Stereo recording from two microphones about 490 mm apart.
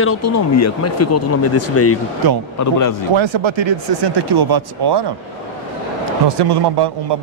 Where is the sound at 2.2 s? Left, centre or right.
Right.